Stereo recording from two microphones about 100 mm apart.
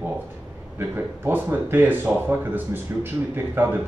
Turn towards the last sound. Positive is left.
turn(degrees=-20)  # may be behind; listen again after turning